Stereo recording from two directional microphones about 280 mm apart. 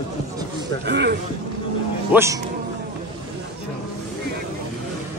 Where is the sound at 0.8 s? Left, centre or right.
Right.